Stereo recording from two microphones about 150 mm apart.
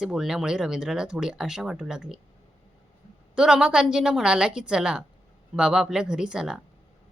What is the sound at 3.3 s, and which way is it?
Speech, 5° right (ahead or behind).